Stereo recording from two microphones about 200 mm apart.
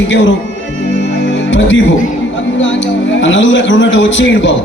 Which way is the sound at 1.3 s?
65° left (ahead or behind).